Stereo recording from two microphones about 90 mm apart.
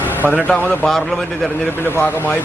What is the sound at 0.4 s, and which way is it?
Speech, 20° left (ahead or behind).